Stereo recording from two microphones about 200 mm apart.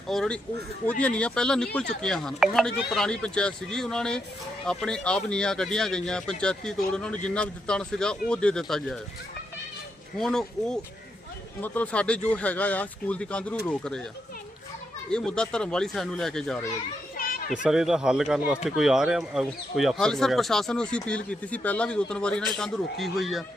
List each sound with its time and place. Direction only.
0.1 s speech: centre (ahead or behind)
10.2 s speech: centre (ahead or behind)
15.1 s speech: 5° left (ahead or behind)
17.2 s children playing: 45° left (ahead or behind)
17.5 s speech: 5° right (ahead or behind)